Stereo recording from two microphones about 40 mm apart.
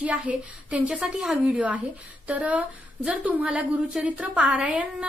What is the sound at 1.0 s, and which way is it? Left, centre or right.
Speech, centre.